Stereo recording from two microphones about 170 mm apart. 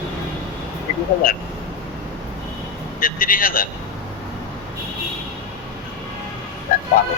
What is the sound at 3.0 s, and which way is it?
Speech, 55° left (ahead or behind).